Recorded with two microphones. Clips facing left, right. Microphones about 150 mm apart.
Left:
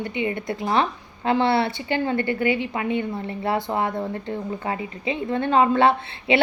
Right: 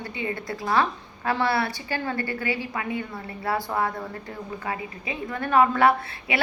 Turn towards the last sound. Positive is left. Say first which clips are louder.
# left 4 dB
turn(degrees=25)  # may be behind; listen again after turning